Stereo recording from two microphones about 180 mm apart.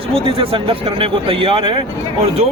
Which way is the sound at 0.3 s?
30° right (ahead or behind).